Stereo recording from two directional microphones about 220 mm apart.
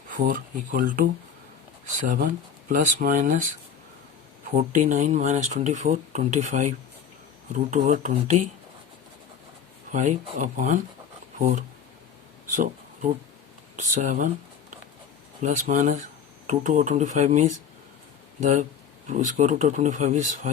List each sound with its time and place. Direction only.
0.2 s speech: 40° right (ahead or behind)
4.5 s speech: 35° right (ahead or behind)
9.9 s speech: 35° right (ahead or behind)
13.7 s speech: 35° right (ahead or behind)
15.4 s speech: 35° right (ahead or behind)